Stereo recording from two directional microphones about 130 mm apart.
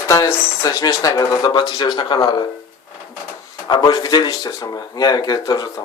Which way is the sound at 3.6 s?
30° left (ahead or behind).